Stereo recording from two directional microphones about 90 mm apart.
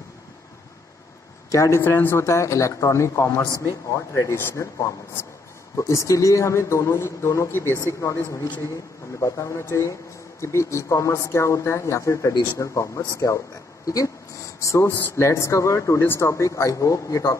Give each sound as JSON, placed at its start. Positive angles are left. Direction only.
{"t": 1.5, "sound": "a man's voice", "side_deg": 35}